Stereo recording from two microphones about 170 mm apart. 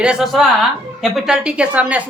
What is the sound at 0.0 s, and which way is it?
A woman's voice, 5° right (ahead or behind).